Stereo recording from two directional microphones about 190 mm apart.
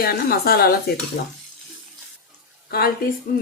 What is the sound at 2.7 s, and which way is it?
Speech, 55° left (ahead or behind).